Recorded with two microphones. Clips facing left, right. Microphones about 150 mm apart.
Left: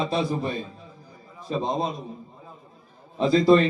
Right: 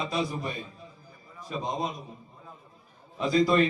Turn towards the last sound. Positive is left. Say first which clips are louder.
# left 5 dB
turn(degrees=30)  # may be behind; listen again after turning